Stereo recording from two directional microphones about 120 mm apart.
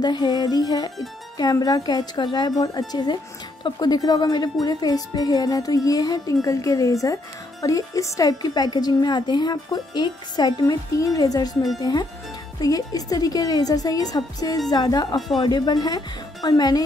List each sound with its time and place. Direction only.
0.0 s a woman's voice: 35° left (ahead or behind)